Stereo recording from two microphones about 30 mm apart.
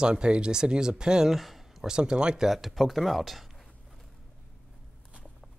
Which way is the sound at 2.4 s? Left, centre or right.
Centre.